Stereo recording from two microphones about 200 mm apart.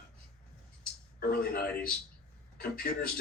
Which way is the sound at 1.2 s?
50° left (ahead or behind).